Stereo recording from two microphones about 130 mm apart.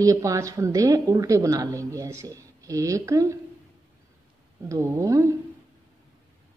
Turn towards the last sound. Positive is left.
turn(degrees=-25)  # may be behind; listen again after turning